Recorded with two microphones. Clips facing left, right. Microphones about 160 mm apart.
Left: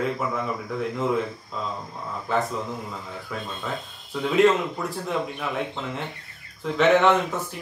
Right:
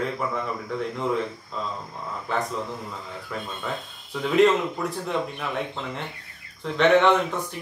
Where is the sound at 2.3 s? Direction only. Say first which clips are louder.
Left 3 dB; centre (ahead or behind).